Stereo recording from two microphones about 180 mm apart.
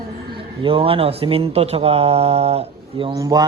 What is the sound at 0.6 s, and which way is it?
A man's voice, 30° right (ahead or behind).